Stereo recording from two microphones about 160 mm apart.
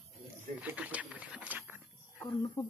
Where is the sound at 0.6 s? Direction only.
10° right (ahead or behind).